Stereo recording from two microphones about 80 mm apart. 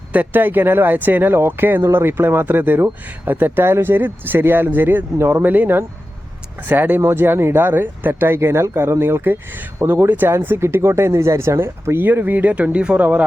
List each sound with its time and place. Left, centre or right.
0.1 s speech: right